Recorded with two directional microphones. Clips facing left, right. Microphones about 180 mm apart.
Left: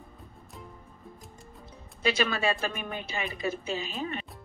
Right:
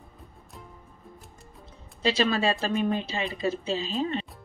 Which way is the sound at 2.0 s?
30° right (ahead or behind).